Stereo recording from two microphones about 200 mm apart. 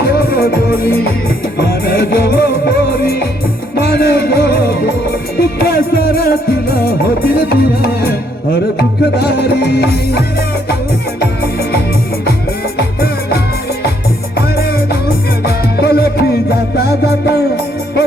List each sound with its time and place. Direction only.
0.0 s music: 50° left (ahead or behind)
7.5 s music: 50° left (ahead or behind)
9.1 s music: 55° left (ahead or behind)
12.7 s music: 50° left (ahead or behind)
14.5 s music: 50° left (ahead or behind)